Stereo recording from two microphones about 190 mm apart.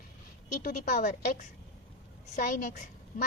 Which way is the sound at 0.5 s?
45° left (ahead or behind).